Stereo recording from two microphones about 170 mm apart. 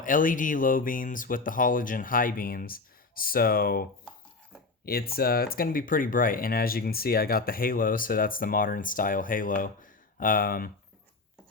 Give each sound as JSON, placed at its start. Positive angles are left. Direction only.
{"t": 0.0, "sound": "speech", "side_deg": 50}
{"t": 4.9, "sound": "speech", "side_deg": 65}